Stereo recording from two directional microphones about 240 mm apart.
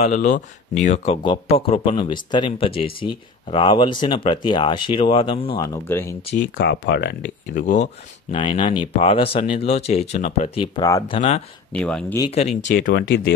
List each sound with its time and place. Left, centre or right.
0.0 s speech: left
5.9 s speech: centre
6.6 s speech: left
10.6 s speech: centre
11.1 s speech: left
11.7 s speech: centre
12.2 s speech: left
12.6 s speech: left